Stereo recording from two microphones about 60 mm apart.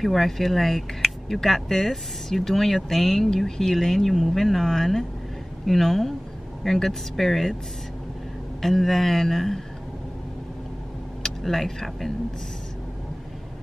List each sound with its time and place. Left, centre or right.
0.0 s speech: centre
8.5 s speech: centre
11.2 s speech: centre